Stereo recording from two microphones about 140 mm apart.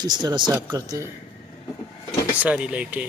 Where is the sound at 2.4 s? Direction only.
10° right (ahead or behind).